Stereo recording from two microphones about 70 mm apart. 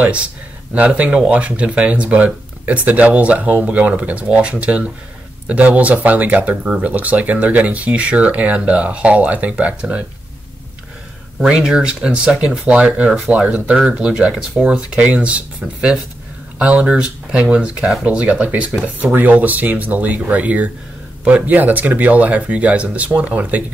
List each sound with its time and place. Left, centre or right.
0.0 s speech: centre
11.3 s speech: centre